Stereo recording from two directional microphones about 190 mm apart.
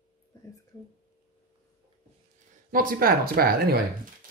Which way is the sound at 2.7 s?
50° right (ahead or behind).